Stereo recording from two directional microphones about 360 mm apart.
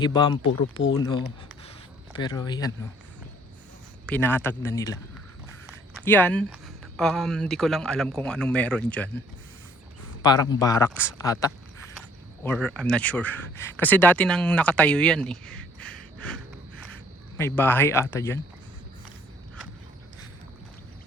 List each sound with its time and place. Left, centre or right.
0.0 s speech: centre
4.0 s speech: centre
10.2 s speech: centre
16.9 s speech: centre